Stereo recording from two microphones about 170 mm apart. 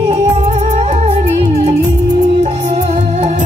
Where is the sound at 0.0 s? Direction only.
40° right (ahead or behind).